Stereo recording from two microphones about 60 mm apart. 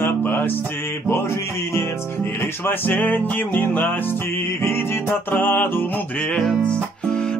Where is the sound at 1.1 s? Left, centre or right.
Left.